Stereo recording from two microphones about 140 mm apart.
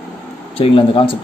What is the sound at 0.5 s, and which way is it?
Speech, 40° left (ahead or behind).